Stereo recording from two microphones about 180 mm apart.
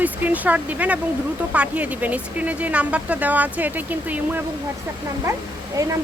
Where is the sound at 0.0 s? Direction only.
10° right (ahead or behind).